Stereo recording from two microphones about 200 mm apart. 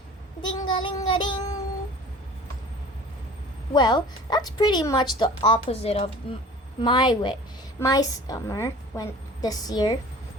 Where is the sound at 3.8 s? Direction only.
20° left (ahead or behind).